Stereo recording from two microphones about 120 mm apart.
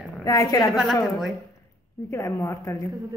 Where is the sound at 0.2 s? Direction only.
30° left (ahead or behind).